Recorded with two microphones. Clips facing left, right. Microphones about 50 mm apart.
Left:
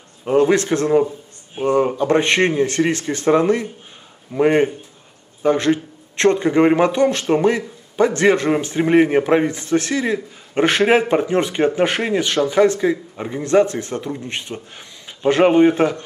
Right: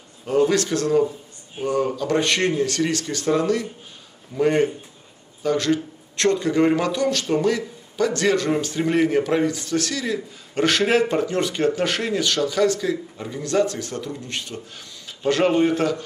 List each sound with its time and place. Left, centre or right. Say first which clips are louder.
0.2 s speech: left 4 dB; left